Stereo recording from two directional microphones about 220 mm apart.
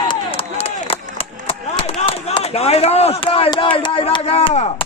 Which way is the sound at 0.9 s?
25° left (ahead or behind).